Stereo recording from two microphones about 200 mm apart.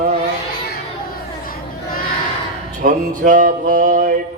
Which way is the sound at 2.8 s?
40° right (ahead or behind).